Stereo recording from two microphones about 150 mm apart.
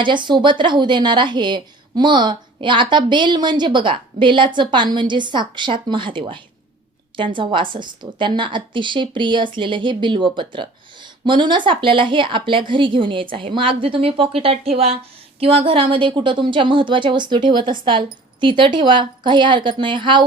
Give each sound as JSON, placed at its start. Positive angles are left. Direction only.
{"t": 0.0, "sound": "a woman's voice", "side_deg": -30}